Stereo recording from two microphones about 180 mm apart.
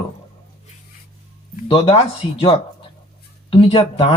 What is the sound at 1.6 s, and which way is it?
Speech, 30° left (ahead or behind).